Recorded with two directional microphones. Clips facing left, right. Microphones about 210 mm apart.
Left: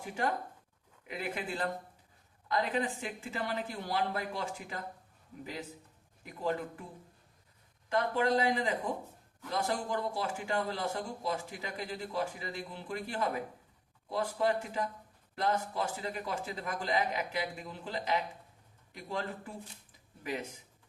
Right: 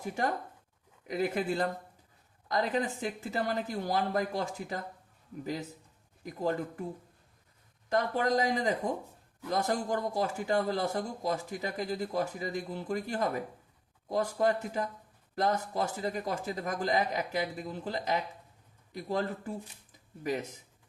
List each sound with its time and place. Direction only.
0.0 s a man's voice: 40° right (ahead or behind)
6.2 s a man's voice: 40° right (ahead or behind)
7.9 s a man's voice: 40° right (ahead or behind)